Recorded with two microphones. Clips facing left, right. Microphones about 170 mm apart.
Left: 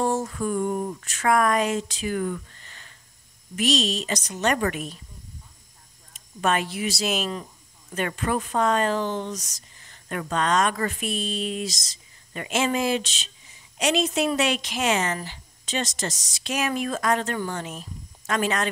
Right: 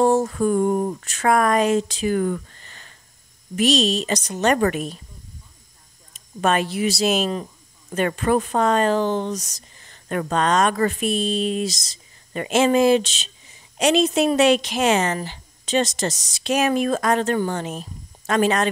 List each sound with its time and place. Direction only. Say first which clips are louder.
0.2 s speech: right 6 dB; 40° right (ahead or behind)
3.5 s speech: right 5 dB; 30° right (ahead or behind)
6.4 s speech: right 4 dB; 35° right (ahead or behind)